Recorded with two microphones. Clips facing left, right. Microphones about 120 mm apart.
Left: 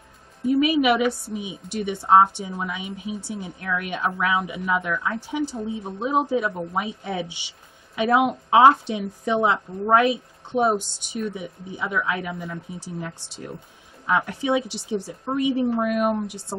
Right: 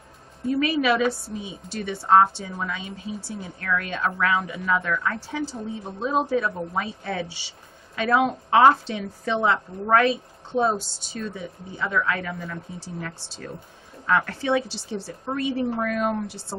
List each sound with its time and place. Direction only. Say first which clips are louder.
0.5 s a woman's voice: left 3 dB; 15° left (ahead or behind)